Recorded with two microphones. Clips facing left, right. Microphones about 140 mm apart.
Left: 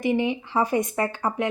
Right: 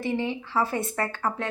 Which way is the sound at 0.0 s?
15° left (ahead or behind).